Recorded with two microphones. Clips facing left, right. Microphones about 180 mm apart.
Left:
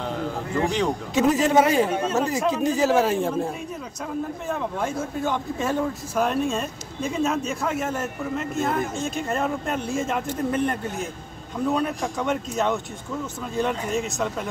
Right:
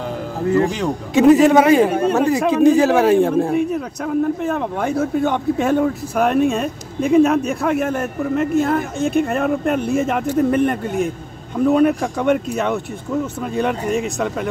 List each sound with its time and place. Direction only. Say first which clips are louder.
1.1 s a man's voice: right 9 dB; 60° right (ahead or behind)